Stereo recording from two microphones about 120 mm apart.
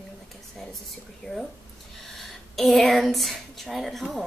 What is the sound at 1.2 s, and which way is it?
A woman's voice, 5° left (ahead or behind).